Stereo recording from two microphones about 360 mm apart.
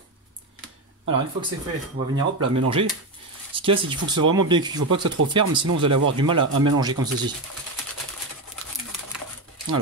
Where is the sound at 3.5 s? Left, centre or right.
Centre.